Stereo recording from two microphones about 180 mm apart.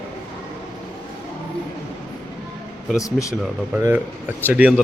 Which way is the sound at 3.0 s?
15° left (ahead or behind).